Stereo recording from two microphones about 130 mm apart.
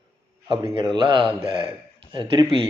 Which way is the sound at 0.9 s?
40° right (ahead or behind).